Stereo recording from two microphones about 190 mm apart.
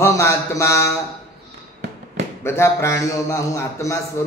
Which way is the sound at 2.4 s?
15° left (ahead or behind).